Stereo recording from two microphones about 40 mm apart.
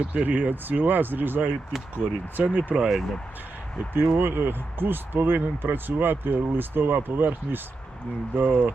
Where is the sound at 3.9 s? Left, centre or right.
Right.